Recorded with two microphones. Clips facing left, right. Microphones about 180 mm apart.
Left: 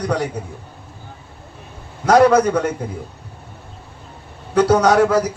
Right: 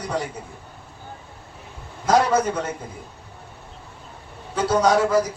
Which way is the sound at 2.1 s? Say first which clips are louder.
Left 7 dB; 65° left (ahead or behind).